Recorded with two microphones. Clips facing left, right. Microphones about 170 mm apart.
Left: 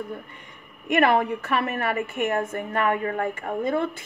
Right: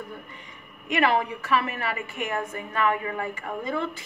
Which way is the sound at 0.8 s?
55° left (ahead or behind).